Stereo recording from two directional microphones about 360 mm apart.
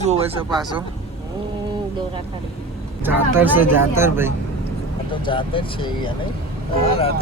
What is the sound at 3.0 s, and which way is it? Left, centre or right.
Speech, centre.